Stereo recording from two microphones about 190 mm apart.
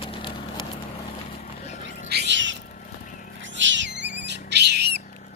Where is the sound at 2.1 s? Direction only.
65° right (ahead or behind).